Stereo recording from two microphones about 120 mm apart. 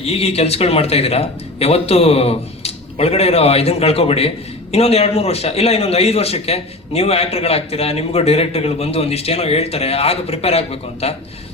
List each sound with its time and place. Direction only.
0.0 s a man's voice: 60° left (ahead or behind)